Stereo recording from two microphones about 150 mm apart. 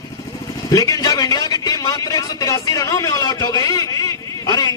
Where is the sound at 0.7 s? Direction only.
20° left (ahead or behind).